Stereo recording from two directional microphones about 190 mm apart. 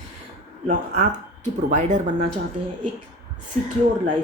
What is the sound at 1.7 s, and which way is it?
Speech, 40° right (ahead or behind).